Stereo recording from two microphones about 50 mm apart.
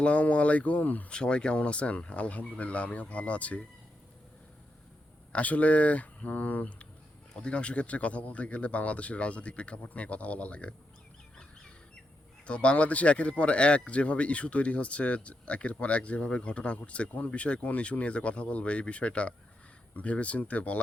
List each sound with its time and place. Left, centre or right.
0.0 s speech: left
1.1 s speech: centre
5.3 s speech: left
12.5 s speech: left